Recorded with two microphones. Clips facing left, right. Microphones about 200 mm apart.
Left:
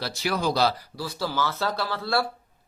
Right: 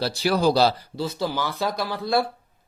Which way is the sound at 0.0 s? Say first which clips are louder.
Right 6 dB; 35° right (ahead or behind).